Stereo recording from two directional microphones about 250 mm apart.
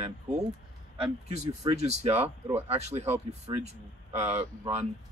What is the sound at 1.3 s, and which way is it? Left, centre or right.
Speech, right.